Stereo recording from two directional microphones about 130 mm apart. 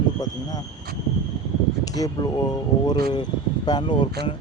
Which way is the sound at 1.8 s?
30° left (ahead or behind).